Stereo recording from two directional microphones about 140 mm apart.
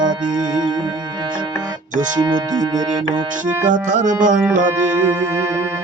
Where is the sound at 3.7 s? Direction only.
65° right (ahead or behind).